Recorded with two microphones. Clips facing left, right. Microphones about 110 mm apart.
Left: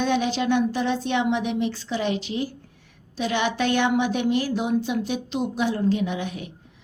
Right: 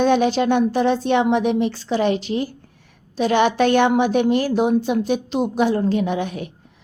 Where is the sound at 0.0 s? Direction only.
50° right (ahead or behind).